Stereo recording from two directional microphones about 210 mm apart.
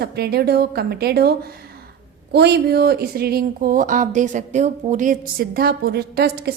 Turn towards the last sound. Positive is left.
turn(degrees=-50)  # may be behind; listen again after turning